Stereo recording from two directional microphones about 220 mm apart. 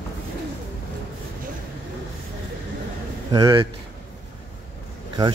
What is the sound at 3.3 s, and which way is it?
Speech, 20° right (ahead or behind).